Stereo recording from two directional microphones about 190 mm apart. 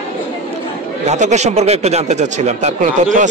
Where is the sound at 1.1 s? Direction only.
35° right (ahead or behind).